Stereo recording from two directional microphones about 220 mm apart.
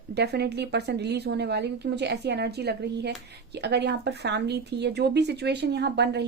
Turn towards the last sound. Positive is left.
turn(degrees=-50)  # may be behind; listen again after turning